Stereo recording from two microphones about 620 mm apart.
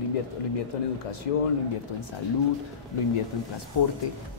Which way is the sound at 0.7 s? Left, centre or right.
Left.